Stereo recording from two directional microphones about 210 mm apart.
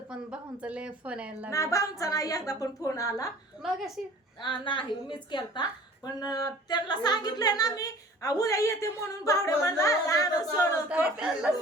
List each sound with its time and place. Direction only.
0.1 s a woman's voice: 5° right (ahead or behind)
1.5 s a woman's voice: 15° left (ahead or behind)
3.6 s a woman's voice: centre (ahead or behind)
4.4 s a woman's voice: 25° left (ahead or behind)
10.8 s a woman's voice: 5° right (ahead or behind)